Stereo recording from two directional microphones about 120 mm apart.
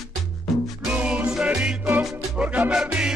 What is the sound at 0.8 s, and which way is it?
Music, 10° right (ahead or behind).